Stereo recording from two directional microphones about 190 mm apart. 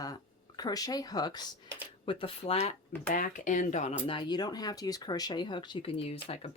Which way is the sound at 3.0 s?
45° left (ahead or behind).